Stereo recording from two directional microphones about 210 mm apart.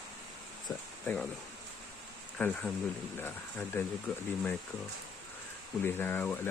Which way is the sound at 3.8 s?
10° left (ahead or behind).